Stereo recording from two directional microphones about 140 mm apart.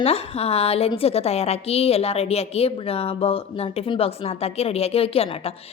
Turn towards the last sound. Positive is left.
turn(degrees=45)  # may be behind; listen again after turning